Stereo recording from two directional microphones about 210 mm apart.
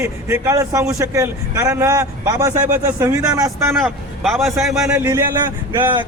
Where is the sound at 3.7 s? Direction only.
Centre (ahead or behind).